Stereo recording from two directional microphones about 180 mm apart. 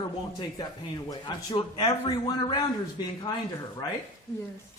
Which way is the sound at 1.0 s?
20° left (ahead or behind).